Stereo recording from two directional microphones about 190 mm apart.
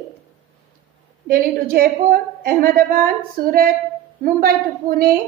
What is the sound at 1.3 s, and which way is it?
A woman's voice, 50° right (ahead or behind).